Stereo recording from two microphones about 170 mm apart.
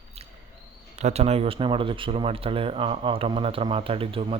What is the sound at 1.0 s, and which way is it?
A man's voice, 40° right (ahead or behind).